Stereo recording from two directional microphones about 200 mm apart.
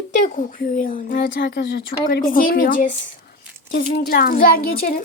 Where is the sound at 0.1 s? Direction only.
40° left (ahead or behind).